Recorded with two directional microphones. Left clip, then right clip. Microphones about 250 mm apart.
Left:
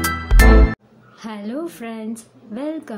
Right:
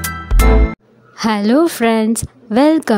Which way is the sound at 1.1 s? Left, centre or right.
Right.